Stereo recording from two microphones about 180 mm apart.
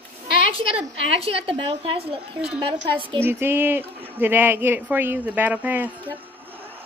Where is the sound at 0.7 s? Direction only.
35° right (ahead or behind).